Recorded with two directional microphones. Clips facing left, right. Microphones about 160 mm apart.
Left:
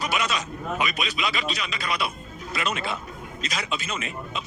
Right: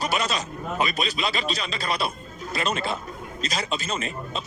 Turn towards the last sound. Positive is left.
turn(degrees=-35)  # may be behind; listen again after turning